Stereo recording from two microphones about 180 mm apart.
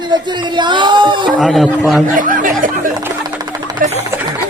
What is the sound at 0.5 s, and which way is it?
Speech, 25° right (ahead or behind).